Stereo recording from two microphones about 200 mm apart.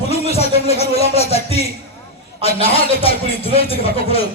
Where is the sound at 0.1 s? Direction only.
30° left (ahead or behind).